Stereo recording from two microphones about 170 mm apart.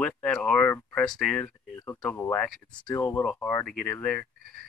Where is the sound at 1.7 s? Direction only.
15° left (ahead or behind).